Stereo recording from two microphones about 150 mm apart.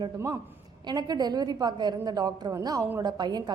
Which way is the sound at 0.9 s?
25° right (ahead or behind).